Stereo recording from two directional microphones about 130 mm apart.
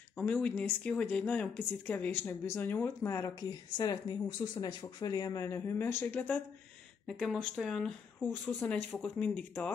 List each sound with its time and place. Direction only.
0.2 s speech: 10° left (ahead or behind)
7.1 s speech: centre (ahead or behind)
8.2 s speech: 15° left (ahead or behind)